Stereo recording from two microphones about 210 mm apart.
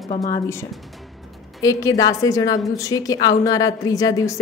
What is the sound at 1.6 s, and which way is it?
A woman's voice, 15° left (ahead or behind).